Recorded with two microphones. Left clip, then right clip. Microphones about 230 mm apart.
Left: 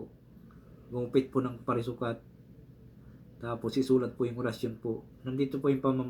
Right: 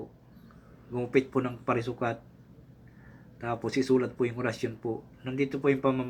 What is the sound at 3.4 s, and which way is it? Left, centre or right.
A man's voice, centre.